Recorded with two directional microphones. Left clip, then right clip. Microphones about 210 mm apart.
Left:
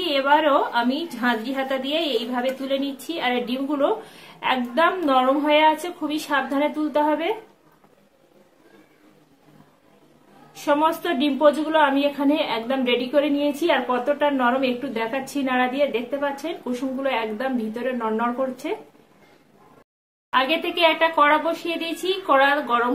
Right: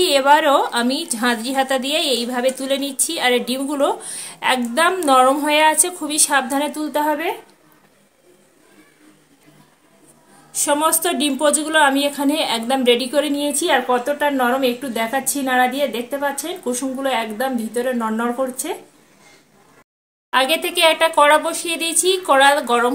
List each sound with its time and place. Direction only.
0.0 s a woman's voice: 60° right (ahead or behind)
10.6 s a woman's voice: 55° right (ahead or behind)
20.2 s a woman's voice: 55° right (ahead or behind)